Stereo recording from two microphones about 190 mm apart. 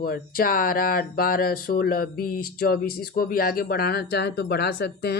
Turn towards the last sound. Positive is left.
turn(degrees=60)  # may be behind; listen again after turning